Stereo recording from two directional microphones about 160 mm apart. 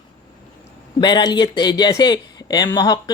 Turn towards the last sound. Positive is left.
turn(degrees=25)  # may be behind; listen again after turning